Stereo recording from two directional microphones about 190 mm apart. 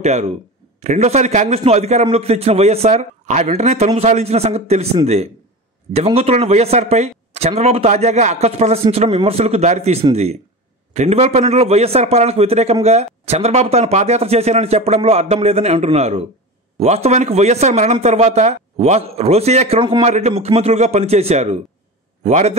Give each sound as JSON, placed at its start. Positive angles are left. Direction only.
{"t": 0.0, "sound": "a man's voice", "side_deg": -35}